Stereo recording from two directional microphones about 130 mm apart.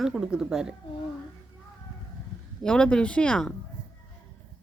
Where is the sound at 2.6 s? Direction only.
5° left (ahead or behind).